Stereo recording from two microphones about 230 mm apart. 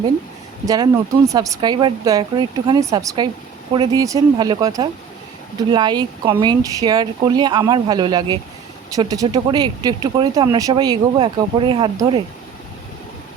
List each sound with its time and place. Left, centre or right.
0.6 s speech: centre